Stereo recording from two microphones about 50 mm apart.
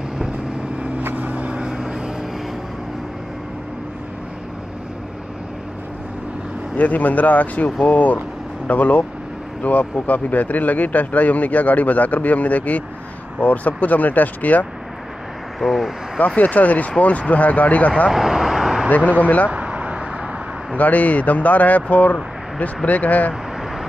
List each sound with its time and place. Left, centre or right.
1.1 s vehicle: right
6.8 s speech: left
15.6 s speech: centre
16.3 s speech: left
18.1 s vehicle: centre
18.9 s speech: left
19.5 s a sound: right
20.7 s speech: left